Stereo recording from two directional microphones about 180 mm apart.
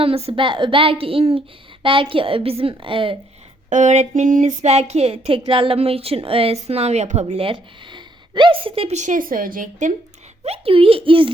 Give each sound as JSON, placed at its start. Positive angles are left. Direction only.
{"t": 0.0, "sound": "speech", "side_deg": -30}
{"t": 3.7, "sound": "speech", "side_deg": -40}
{"t": 10.4, "sound": "speech", "side_deg": -35}